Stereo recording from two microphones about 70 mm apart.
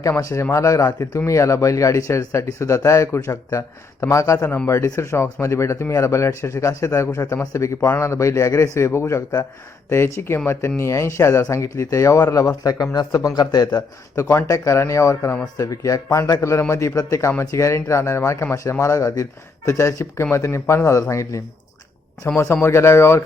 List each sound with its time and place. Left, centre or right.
0.2 s speech: left
14.2 s speech: left
16.4 s speech: left